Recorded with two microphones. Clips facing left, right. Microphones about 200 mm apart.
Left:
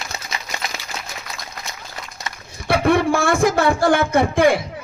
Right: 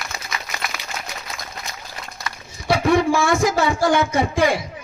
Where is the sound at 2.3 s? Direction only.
25° left (ahead or behind).